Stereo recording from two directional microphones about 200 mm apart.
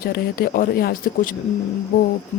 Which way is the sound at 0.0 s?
45° left (ahead or behind).